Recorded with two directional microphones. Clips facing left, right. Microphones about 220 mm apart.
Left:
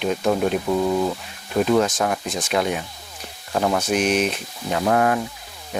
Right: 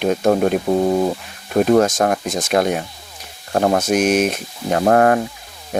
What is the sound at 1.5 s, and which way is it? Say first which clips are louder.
Speech: right 5 dB; 45° right (ahead or behind).